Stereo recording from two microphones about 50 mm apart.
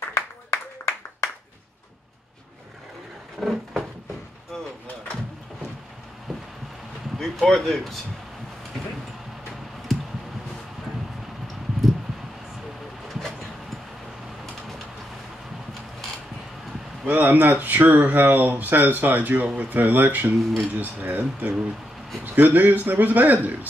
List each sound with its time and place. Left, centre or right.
0.1 s clapping: left
3.3 s a sound: centre
7.2 s speech: centre
17.0 s speech: right